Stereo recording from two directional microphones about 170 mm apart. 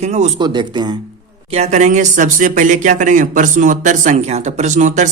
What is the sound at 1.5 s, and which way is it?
Speech, 40° right (ahead or behind).